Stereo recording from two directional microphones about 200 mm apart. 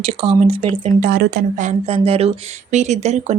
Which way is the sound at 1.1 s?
50° right (ahead or behind).